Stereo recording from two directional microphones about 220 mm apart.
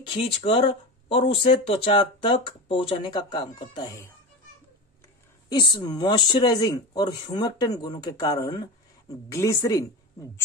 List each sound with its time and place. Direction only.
0.0 s speech: 25° left (ahead or behind)
5.5 s speech: 20° left (ahead or behind)